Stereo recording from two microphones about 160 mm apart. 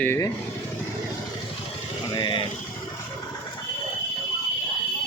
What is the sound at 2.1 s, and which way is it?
Speech, 25° left (ahead or behind).